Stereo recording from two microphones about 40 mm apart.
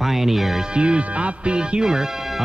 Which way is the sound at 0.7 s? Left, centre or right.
Right.